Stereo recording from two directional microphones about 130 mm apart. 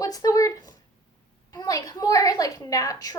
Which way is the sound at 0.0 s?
25° left (ahead or behind).